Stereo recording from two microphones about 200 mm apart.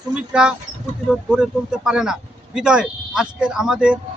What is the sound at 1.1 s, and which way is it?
Speech, 5° right (ahead or behind).